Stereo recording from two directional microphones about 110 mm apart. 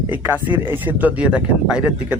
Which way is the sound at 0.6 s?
15° right (ahead or behind).